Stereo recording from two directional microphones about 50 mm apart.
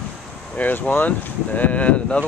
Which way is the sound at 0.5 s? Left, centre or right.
Left.